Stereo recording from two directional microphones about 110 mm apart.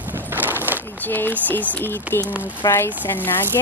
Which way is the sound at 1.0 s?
15° left (ahead or behind).